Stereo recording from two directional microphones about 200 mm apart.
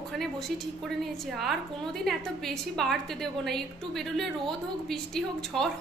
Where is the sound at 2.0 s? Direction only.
Centre (ahead or behind).